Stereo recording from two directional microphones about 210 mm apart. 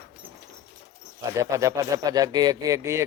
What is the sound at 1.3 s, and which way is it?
Speech, 15° right (ahead or behind).